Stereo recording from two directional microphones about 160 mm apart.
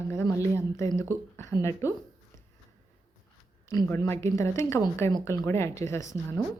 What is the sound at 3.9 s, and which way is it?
A woman's voice, 15° left (ahead or behind).